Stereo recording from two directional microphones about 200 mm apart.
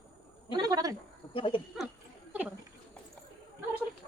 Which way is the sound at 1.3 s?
25° left (ahead or behind).